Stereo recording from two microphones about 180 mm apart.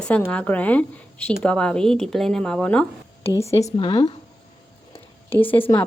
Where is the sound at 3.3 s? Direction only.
15° left (ahead or behind).